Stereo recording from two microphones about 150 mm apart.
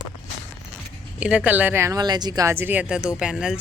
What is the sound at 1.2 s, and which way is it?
Speech, 10° right (ahead or behind).